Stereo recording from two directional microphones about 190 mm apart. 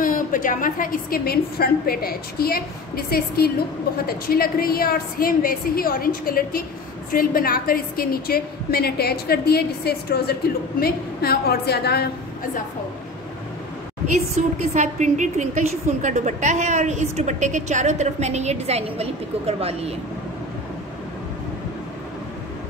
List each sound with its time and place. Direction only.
0.0 s a woman's voice: 45° left (ahead or behind)
14.3 s a woman's voice: 35° right (ahead or behind)